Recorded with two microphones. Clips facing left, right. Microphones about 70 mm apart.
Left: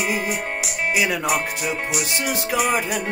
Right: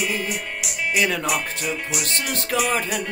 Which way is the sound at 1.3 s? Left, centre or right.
Left.